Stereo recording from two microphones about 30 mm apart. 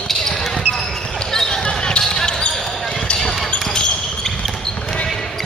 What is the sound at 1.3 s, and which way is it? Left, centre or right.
Basketball bounce, left.